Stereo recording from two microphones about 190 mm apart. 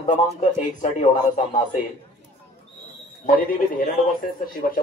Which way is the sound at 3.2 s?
45° left (ahead or behind).